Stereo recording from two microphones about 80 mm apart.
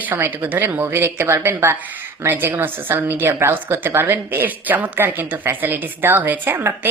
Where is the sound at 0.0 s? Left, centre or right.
Right.